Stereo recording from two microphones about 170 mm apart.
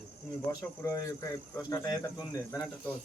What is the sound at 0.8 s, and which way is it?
Speech, 20° left (ahead or behind).